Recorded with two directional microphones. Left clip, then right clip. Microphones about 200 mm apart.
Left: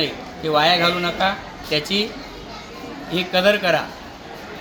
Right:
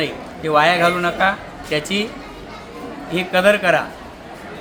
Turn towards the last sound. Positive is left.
turn(degrees=5)  # may be behind; listen again after turning